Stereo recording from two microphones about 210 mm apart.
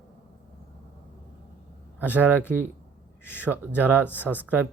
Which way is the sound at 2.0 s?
5° right (ahead or behind).